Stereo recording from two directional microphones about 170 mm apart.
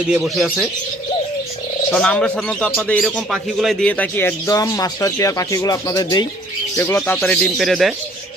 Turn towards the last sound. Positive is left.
turn(degrees=0)  # may be behind; listen again after turning